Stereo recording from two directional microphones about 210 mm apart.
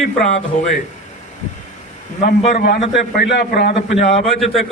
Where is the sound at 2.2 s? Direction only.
45° left (ahead or behind).